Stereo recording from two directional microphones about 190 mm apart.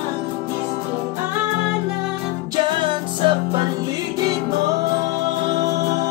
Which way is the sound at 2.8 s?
25° right (ahead or behind).